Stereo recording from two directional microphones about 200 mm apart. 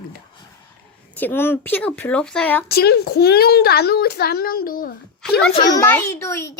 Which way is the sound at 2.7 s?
55° left (ahead or behind).